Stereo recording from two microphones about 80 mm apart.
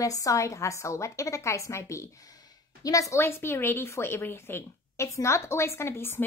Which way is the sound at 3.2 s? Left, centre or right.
Left.